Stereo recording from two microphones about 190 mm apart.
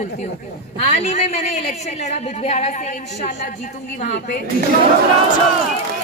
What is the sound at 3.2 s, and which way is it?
Speech, 65° left (ahead or behind).